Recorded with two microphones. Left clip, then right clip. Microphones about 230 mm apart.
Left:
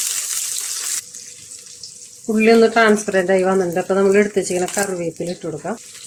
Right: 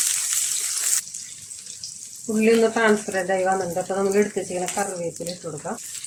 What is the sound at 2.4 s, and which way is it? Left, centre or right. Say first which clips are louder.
Speech: left 6 dB; left.